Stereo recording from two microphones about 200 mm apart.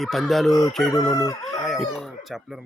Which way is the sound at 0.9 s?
20° left (ahead or behind).